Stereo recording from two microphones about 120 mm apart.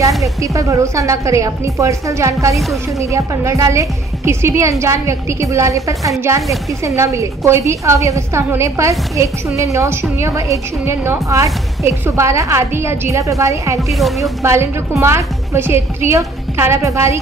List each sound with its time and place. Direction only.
0.4 s a woman's voice: 25° right (ahead or behind)
2.5 s speech: centre (ahead or behind)
3.0 s a woman's voice: 25° right (ahead or behind)
13.7 s speech: centre (ahead or behind)
14.4 s a woman's voice: 25° right (ahead or behind)